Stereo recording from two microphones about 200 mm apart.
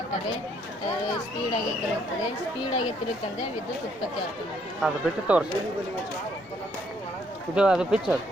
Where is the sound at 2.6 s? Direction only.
20° left (ahead or behind).